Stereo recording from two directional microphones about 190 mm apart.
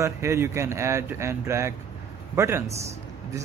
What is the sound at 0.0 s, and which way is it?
Speech, 15° right (ahead or behind).